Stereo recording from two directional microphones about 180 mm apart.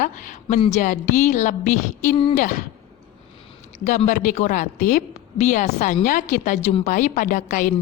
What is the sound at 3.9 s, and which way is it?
A woman's voice, 45° left (ahead or behind).